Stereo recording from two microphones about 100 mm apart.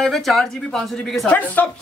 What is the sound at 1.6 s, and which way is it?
Speech, 20° left (ahead or behind).